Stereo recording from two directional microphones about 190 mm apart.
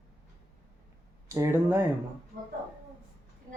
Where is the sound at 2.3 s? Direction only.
55° right (ahead or behind).